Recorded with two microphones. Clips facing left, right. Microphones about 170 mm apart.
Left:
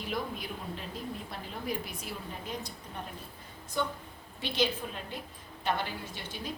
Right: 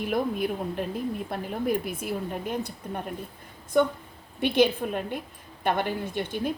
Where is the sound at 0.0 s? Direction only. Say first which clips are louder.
Right 10 dB; 55° right (ahead or behind).